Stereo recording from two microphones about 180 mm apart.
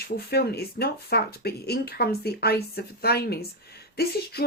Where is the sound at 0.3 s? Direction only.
60° left (ahead or behind).